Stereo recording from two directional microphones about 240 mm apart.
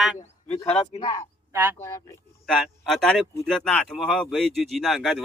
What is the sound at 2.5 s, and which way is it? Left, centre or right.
Speech, centre.